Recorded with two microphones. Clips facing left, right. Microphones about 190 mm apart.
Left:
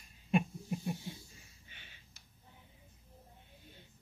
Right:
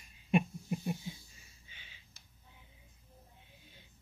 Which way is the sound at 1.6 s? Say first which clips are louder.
Left 1 dB; 55° left (ahead or behind).